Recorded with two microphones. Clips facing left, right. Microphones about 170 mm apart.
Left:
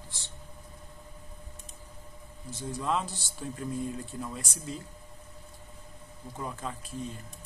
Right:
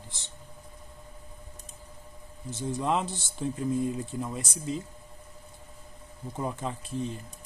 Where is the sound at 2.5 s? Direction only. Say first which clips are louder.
Right 3 dB; 25° right (ahead or behind).